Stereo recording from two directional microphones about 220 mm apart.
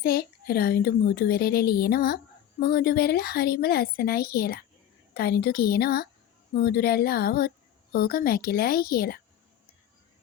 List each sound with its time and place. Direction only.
0.0 s a child's voice: 45° left (ahead or behind)